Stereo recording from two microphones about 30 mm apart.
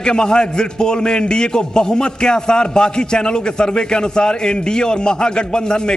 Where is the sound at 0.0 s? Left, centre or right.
Left.